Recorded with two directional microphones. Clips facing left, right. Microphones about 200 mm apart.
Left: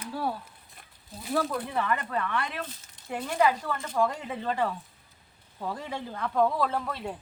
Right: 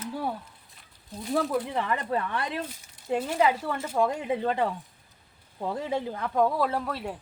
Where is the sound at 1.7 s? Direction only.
20° right (ahead or behind).